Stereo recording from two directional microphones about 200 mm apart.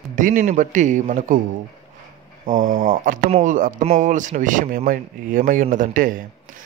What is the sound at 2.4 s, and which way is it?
A man's voice, 40° right (ahead or behind).